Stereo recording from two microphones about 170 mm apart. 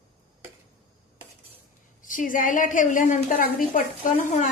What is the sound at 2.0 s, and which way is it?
A woman's voice, 50° left (ahead or behind).